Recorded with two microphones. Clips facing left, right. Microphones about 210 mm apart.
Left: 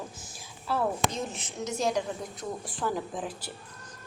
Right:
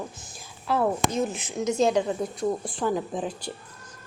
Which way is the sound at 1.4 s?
10° right (ahead or behind).